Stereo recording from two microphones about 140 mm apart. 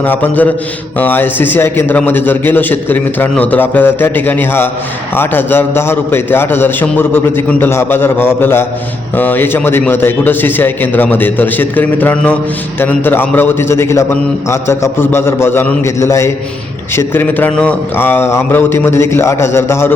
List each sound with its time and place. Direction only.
0.0 s a man's voice: 10° left (ahead or behind)